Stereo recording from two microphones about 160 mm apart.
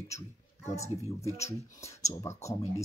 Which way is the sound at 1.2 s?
20° left (ahead or behind).